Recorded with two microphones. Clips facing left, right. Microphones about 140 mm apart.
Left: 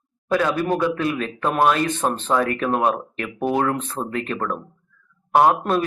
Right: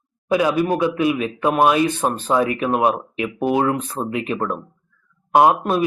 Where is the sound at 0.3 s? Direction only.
10° right (ahead or behind).